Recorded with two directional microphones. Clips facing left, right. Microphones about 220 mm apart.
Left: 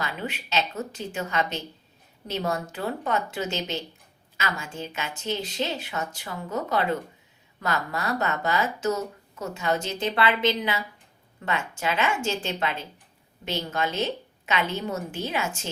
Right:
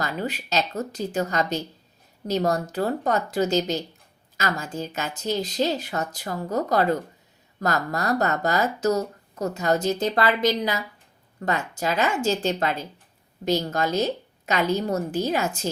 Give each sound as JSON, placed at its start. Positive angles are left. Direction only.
{"t": 0.0, "sound": "speech", "side_deg": -40}